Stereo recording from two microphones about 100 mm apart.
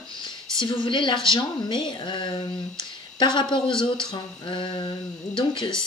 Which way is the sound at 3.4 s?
55° left (ahead or behind).